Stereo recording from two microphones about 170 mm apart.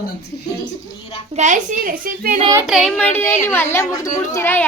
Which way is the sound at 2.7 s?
Centre (ahead or behind).